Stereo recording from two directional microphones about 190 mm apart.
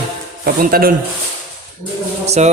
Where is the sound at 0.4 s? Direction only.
50° right (ahead or behind).